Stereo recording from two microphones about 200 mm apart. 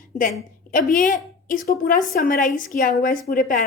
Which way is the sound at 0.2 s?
40° left (ahead or behind).